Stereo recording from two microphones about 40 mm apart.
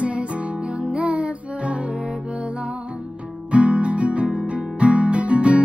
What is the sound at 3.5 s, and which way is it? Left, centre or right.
Music, right.